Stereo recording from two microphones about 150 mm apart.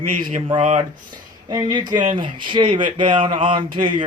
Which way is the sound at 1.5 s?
30° right (ahead or behind).